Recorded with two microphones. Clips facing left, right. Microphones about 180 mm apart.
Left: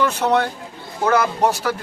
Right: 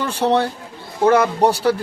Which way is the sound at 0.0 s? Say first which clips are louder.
Even; 30° right (ahead or behind).